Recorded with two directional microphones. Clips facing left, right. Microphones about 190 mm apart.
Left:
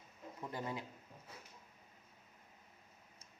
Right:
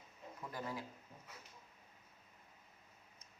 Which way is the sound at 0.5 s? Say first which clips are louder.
Left 2 dB; 20° left (ahead or behind).